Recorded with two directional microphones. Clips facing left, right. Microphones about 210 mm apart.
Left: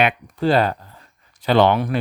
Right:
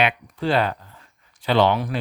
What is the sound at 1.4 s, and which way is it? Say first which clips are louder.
Speech: left 3 dB; 50° left (ahead or behind).